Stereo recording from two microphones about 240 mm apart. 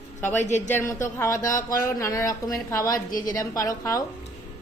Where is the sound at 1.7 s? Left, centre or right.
Centre.